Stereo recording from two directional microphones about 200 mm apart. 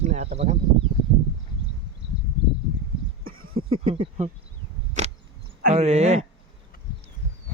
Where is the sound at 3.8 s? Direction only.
30° right (ahead or behind).